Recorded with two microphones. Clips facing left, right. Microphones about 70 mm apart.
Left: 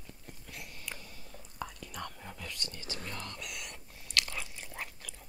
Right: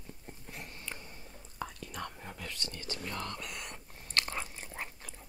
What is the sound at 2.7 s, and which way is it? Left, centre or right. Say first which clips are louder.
Whispering: right 2 dB; centre.